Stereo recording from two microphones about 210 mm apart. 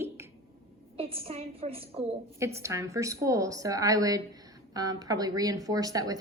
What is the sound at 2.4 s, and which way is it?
A woman's voice, 15° right (ahead or behind).